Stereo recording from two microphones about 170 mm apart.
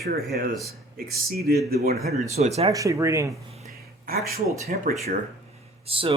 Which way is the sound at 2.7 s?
20° right (ahead or behind).